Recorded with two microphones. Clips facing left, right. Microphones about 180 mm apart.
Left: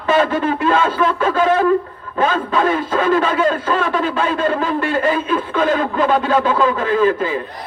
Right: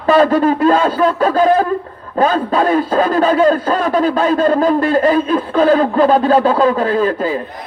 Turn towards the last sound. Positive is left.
turn(degrees=-35)  # may be behind; listen again after turning